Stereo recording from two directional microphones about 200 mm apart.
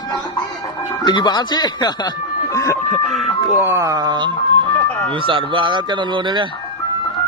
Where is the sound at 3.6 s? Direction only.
10° right (ahead or behind).